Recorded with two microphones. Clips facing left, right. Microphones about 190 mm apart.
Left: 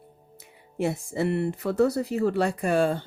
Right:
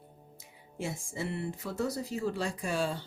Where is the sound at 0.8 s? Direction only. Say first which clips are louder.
Left 10 dB; 65° left (ahead or behind).